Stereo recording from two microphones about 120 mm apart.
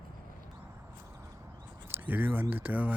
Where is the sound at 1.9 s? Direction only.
15° right (ahead or behind).